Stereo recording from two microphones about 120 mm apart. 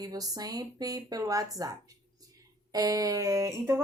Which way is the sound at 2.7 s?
30° right (ahead or behind).